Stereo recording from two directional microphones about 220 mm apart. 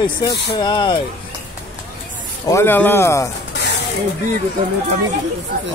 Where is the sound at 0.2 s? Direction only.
20° left (ahead or behind).